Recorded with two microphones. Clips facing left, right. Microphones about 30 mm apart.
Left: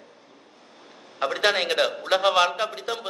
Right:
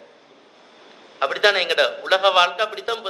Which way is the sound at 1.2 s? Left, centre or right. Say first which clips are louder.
Right 4 dB; centre.